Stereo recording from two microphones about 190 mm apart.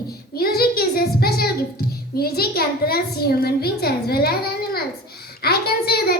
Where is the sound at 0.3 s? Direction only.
55° left (ahead or behind).